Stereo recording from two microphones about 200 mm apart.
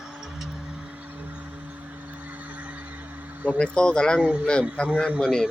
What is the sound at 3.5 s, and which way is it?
Speech, 5° left (ahead or behind).